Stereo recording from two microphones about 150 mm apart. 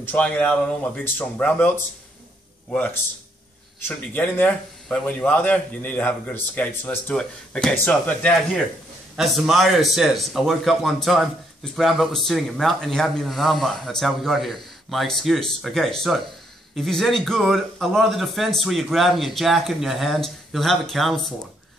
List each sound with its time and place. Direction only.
0.0 s a man's voice: 10° left (ahead or behind)
9.1 s speech: centre (ahead or behind)